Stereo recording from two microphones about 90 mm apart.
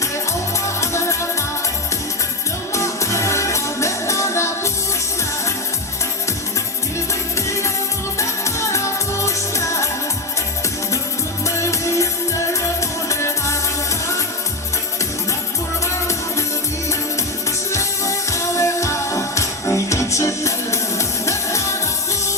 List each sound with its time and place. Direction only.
0.8 s music: 35° left (ahead or behind)
2.7 s music: 35° left (ahead or behind)
8.2 s music: 35° left (ahead or behind)
11.4 s music: 35° left (ahead or behind)
17.7 s music: 35° left (ahead or behind)